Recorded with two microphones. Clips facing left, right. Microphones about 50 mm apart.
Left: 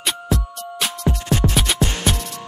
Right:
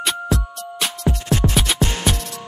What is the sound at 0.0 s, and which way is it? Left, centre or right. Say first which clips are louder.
Music: right 1 dB; centre.